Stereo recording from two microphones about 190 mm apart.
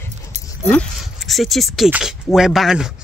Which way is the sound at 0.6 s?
5° left (ahead or behind).